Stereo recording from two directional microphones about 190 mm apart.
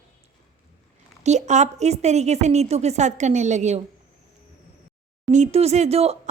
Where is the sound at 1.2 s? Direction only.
35° right (ahead or behind).